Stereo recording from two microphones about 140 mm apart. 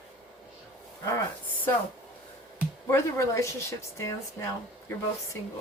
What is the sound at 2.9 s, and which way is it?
Speech, 20° left (ahead or behind).